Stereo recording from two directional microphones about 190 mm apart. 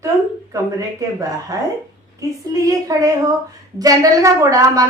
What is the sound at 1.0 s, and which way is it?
A woman's voice, 15° right (ahead or behind).